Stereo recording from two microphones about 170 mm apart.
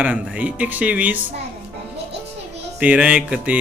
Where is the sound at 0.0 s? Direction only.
10° right (ahead or behind).